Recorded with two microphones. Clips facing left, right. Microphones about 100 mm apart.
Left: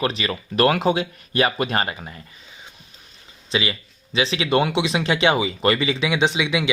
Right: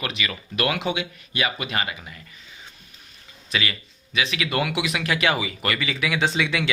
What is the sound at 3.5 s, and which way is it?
Speech, 25° left (ahead or behind).